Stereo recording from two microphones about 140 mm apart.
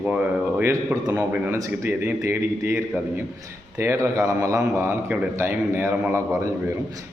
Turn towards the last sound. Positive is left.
turn(degrees=-20)  # may be behind; listen again after turning